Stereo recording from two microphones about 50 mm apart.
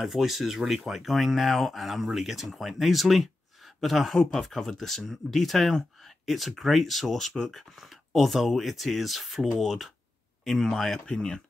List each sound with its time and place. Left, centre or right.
0.0 s speech: centre
11.1 s speech: centre